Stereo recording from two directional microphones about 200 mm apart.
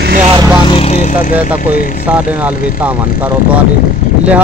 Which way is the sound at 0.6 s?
30° left (ahead or behind).